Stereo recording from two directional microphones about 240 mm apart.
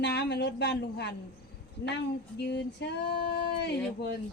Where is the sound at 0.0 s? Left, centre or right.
Left.